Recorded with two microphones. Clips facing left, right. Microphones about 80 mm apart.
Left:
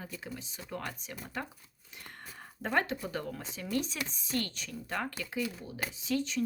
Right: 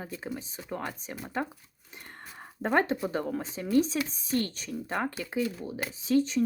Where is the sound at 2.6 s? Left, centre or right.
Right.